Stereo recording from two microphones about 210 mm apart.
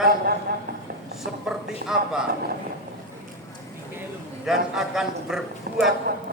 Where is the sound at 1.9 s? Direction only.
Centre (ahead or behind).